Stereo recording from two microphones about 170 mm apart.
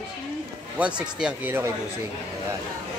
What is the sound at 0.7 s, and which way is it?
Speech, 5° right (ahead or behind).